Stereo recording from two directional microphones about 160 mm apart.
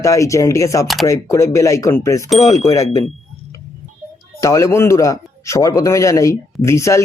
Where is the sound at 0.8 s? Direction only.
Centre (ahead or behind).